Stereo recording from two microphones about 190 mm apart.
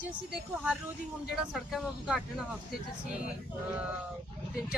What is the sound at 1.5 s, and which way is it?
Speech, centre (ahead or behind).